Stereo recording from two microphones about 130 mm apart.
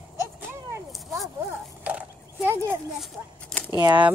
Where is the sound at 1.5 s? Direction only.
15° right (ahead or behind).